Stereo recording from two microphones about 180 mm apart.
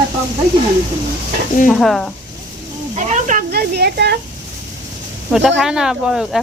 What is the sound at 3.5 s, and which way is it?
Speech, 60° right (ahead or behind).